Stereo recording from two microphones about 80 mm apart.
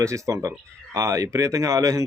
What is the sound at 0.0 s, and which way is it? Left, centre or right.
Speech, right.